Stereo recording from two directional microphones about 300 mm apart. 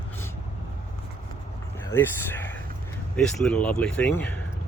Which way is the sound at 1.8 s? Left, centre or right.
Centre.